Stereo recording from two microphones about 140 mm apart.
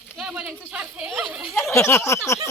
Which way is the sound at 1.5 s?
20° left (ahead or behind).